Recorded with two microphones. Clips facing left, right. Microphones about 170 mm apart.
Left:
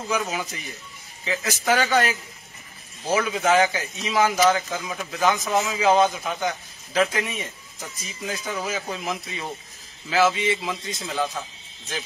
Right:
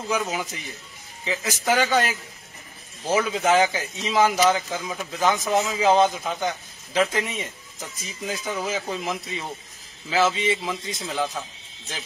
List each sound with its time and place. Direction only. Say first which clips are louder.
0.1 s a man's voice: right 1 dB; 15° right (ahead or behind)
3.1 s a man's voice: even; 20° right (ahead or behind)